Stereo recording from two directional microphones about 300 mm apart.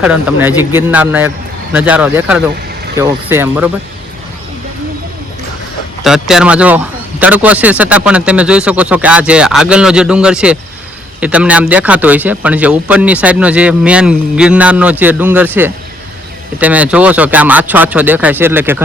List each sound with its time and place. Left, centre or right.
0.0 s speech: centre
6.0 s speech: centre